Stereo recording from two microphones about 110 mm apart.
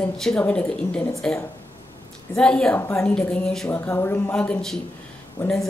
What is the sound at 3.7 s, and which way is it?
Speech, 20° left (ahead or behind).